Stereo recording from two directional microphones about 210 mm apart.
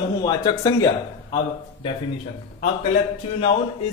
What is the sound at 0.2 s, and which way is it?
Speech, 20° left (ahead or behind).